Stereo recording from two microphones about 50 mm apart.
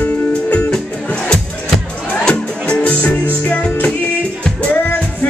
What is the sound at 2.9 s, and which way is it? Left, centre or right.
Music, left.